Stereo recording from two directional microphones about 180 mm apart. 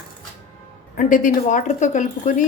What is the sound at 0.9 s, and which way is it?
Speech, 45° left (ahead or behind).